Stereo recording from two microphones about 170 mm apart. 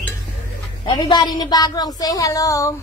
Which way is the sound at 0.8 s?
25° left (ahead or behind).